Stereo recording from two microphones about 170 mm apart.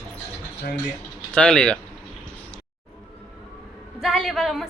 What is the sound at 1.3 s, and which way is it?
Speech, 5° left (ahead or behind).